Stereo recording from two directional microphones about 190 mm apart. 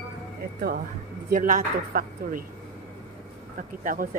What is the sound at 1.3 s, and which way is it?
A woman's voice, 45° right (ahead or behind).